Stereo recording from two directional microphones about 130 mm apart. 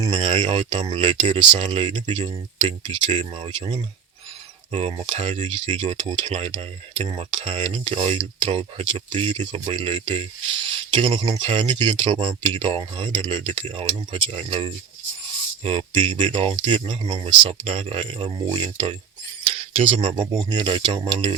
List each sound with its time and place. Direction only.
0.0 s speech: 35° right (ahead or behind); by 5.5 s 60° right (ahead or behind)
5.5 s speech: 40° right (ahead or behind)